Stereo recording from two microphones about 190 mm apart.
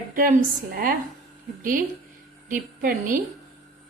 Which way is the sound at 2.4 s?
45° right (ahead or behind).